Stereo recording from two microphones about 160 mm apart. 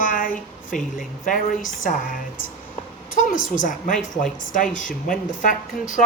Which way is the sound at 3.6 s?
55° left (ahead or behind).